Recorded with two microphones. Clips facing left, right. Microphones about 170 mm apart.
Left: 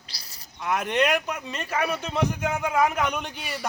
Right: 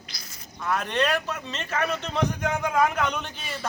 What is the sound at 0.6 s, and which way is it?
Speech, 15° left (ahead or behind).